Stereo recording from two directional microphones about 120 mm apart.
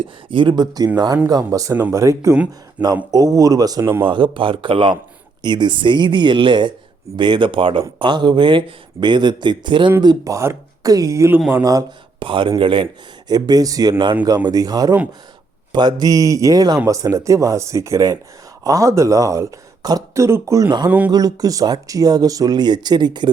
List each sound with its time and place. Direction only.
0.0 s speech: 45° right (ahead or behind); by 2.3 s 25° right (ahead or behind)
2.3 s speech: 10° right (ahead or behind)
3.3 s speech: 30° right (ahead or behind)
11.3 s speech: 10° right (ahead or behind)
11.6 s speech: 30° right (ahead or behind)
12.2 s speech: 45° right (ahead or behind); by 20.7 s 25° right (ahead or behind)
20.7 s speech: 35° right (ahead or behind)